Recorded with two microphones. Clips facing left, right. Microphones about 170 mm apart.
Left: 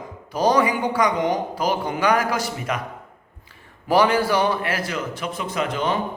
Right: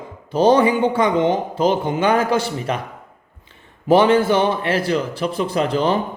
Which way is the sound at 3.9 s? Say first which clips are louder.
Right 5 dB; 25° right (ahead or behind).